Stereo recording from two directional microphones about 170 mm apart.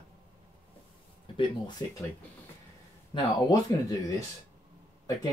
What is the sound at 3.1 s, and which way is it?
Speech, 20° left (ahead or behind).